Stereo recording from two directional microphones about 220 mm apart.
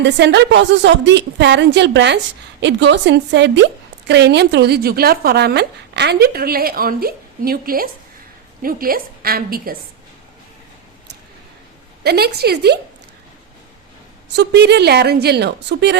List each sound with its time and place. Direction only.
0.0 s a woman's voice: 50° right (ahead or behind)
12.0 s a woman's voice: 45° right (ahead or behind)
14.3 s a woman's voice: 50° right (ahead or behind)